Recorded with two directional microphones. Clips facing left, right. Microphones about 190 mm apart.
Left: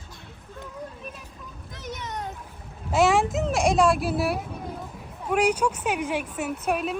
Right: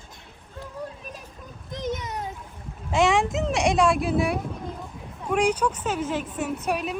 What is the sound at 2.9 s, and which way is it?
A woman's voice, 5° left (ahead or behind).